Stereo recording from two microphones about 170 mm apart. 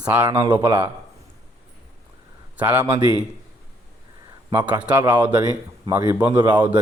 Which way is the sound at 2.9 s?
25° right (ahead or behind).